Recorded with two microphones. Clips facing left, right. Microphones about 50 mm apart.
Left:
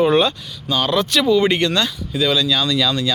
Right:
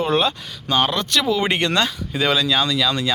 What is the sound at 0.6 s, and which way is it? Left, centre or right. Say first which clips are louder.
Speech: right 1 dB; right.